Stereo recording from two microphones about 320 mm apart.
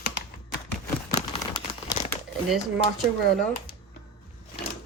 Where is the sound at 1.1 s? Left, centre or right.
Centre.